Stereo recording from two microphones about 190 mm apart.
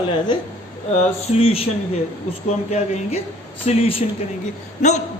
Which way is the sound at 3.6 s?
30° left (ahead or behind).